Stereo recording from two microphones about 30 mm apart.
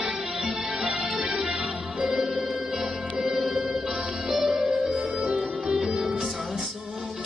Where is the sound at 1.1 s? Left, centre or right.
Right.